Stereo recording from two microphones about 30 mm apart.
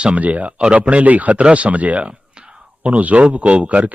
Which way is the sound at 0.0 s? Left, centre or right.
Right.